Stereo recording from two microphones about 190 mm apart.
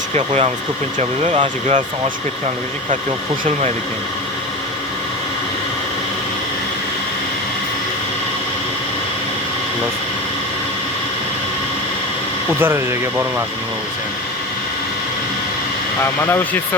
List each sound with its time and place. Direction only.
0.9 s speech: 35° right (ahead or behind)
12.5 s speech: 10° right (ahead or behind)